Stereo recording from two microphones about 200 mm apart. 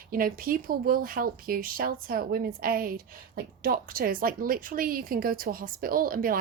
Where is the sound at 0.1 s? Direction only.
45° right (ahead or behind).